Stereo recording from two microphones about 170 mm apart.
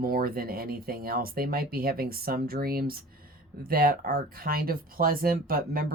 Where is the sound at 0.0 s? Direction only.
60° right (ahead or behind).